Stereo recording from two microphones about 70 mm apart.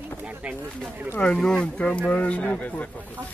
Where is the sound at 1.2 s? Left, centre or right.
Centre.